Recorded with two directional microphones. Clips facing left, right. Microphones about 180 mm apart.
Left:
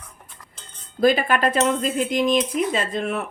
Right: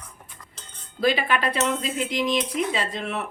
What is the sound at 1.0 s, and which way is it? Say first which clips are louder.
Speech: left 4 dB; 45° left (ahead or behind).